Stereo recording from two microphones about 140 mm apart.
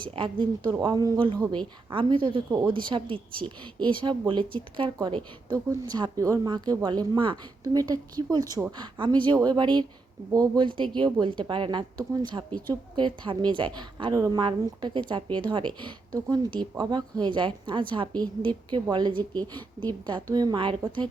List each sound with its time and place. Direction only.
0.0 s a woman's voice: 35° right (ahead or behind)